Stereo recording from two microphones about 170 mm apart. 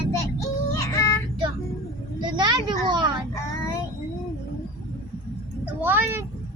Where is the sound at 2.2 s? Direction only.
25° right (ahead or behind).